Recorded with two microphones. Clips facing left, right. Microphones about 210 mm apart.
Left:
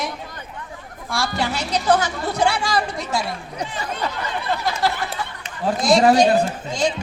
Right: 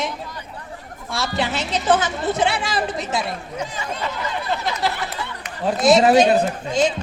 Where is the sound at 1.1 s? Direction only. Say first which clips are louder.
Even; 20° right (ahead or behind).